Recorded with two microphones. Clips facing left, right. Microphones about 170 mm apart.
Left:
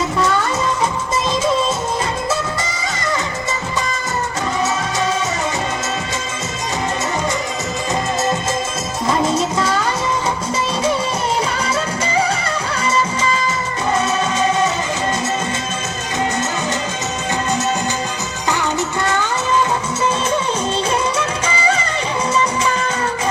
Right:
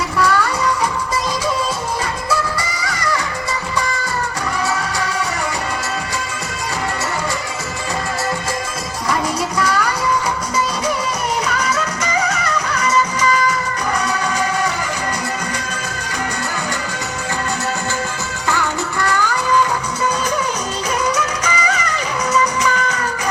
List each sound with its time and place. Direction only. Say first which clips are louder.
0.2 s music: right 3 dB; 20° left (ahead or behind)
2.8 s music: even; 20° left (ahead or behind)
9.0 s music: left 3 dB; 25° left (ahead or behind)
11.4 s music: even; 30° left (ahead or behind)
18.4 s music: left 1 dB; 20° left (ahead or behind)
21.2 s music: even; 25° left (ahead or behind)